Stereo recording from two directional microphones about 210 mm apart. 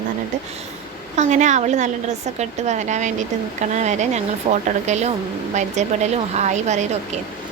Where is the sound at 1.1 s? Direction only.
35° right (ahead or behind).